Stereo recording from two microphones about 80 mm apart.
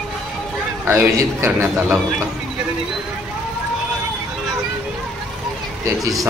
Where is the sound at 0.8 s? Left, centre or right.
Right.